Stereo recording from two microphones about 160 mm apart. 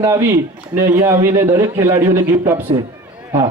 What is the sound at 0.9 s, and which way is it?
A man's voice, 15° right (ahead or behind).